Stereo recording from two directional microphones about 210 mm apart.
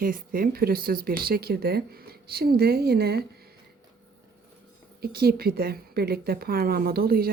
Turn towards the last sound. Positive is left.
turn(degrees=-45)  # may be behind; listen again after turning